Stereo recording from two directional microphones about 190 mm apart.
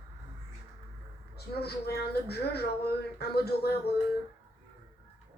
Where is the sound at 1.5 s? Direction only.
55° left (ahead or behind).